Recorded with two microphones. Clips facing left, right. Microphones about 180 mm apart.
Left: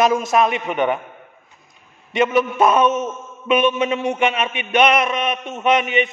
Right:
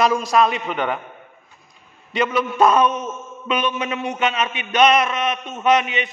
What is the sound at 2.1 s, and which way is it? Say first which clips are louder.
A man's voice: left 4 dB; 25° left (ahead or behind).